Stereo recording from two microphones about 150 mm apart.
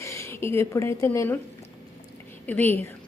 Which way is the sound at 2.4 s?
10° left (ahead or behind).